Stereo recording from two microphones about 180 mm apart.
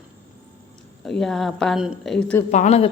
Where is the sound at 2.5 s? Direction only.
40° left (ahead or behind).